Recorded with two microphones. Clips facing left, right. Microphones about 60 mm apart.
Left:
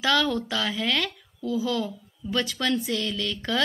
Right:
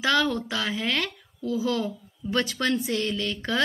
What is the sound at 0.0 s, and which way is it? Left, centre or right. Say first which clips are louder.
A woman's voice: even; right.